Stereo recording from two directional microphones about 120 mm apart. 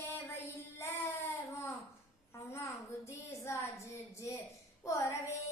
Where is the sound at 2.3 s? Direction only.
20° left (ahead or behind).